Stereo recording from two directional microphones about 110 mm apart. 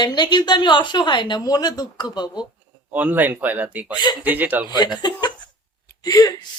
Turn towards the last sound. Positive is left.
turn(degrees=35)  # may be behind; listen again after turning